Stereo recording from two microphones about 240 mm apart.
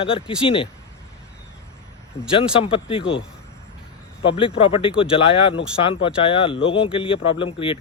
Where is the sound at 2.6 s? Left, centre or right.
Left.